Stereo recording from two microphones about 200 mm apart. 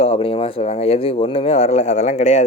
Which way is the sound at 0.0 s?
30° left (ahead or behind).